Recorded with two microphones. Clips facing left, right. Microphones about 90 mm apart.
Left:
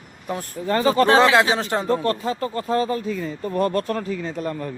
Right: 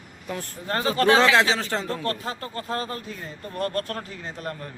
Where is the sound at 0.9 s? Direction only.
35° left (ahead or behind).